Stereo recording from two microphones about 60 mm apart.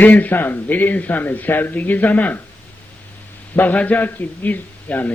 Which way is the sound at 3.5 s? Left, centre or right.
Left.